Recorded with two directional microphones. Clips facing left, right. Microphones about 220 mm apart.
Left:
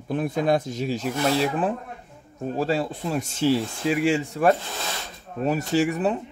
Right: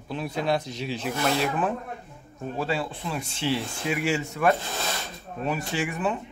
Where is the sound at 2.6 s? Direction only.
40° left (ahead or behind).